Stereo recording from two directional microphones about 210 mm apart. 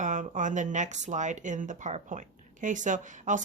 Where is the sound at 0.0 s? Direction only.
35° right (ahead or behind).